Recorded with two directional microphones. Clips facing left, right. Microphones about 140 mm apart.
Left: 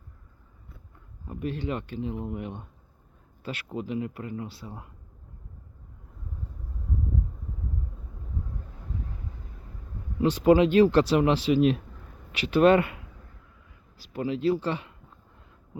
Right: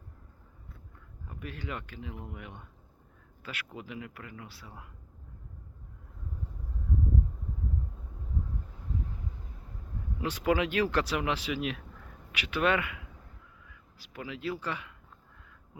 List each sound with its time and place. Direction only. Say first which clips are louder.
1.3 s speech: left 9 dB; 30° left (ahead or behind)
10.2 s speech: left 9 dB; 30° left (ahead or behind)
14.0 s speech: left 11 dB; 30° left (ahead or behind)